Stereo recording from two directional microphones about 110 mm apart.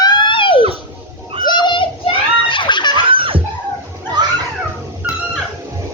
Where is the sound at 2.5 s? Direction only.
45° left (ahead or behind).